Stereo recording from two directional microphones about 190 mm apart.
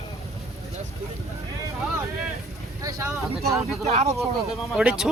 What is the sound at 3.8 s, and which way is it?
Speech, 35° right (ahead or behind).